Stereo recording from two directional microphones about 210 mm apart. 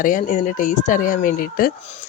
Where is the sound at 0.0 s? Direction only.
40° left (ahead or behind).